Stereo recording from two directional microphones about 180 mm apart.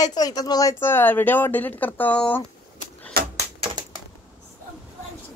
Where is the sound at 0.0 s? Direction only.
20° left (ahead or behind).